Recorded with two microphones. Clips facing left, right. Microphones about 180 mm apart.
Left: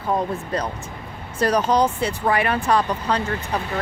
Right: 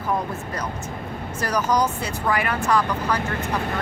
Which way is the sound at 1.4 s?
30° left (ahead or behind).